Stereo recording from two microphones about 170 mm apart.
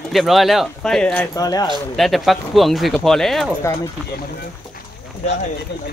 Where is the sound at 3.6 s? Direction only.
20° left (ahead or behind).